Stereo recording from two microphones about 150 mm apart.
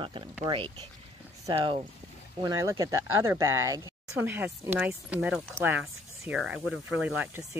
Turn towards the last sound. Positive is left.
turn(degrees=-15)  # may be behind; listen again after turning